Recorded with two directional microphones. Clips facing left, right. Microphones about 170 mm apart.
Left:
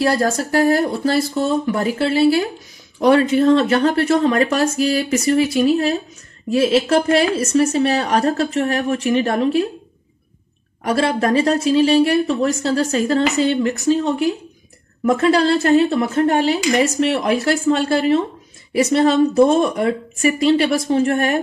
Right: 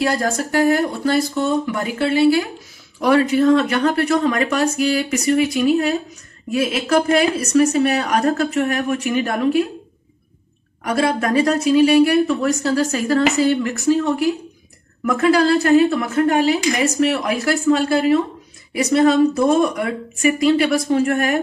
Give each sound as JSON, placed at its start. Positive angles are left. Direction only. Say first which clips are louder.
{"t": 0.0, "sound": "speech", "louder": "left 2 dB", "side_deg": 30}
{"t": 10.8, "sound": "speech", "louder": "left 1 dB", "side_deg": 30}